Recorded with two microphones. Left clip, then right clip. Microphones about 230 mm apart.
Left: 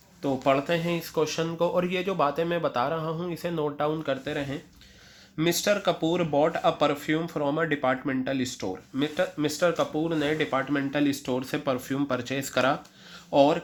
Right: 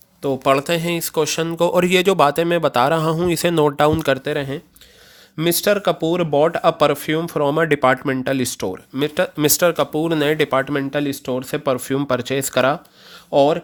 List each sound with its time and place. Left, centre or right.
0.4 s speech: right